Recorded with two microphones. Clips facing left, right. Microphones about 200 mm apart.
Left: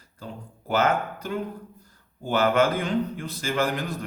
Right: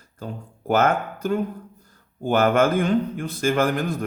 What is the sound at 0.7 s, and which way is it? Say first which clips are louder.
Speech: right 3 dB; 50° right (ahead or behind).